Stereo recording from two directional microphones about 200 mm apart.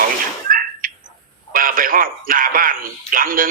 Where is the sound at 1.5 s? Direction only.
45° right (ahead or behind).